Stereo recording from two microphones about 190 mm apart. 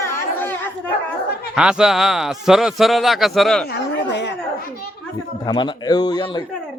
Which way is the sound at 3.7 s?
70° left (ahead or behind).